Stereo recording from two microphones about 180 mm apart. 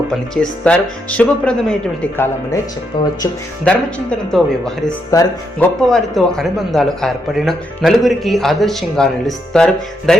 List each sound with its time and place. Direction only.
0.3 s speech: 5° left (ahead or behind)
2.9 s speech: 25° left (ahead or behind)
3.6 s a man's voice: 5° left (ahead or behind)